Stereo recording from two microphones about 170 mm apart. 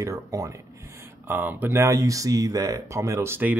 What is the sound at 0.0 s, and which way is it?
Speech, 20° right (ahead or behind).